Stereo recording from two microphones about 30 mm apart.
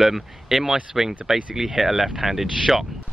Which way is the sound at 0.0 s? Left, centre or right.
Centre.